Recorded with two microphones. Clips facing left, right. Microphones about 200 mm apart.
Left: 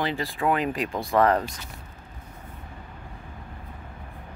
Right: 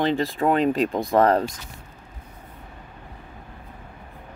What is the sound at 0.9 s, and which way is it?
Speech, 15° right (ahead or behind).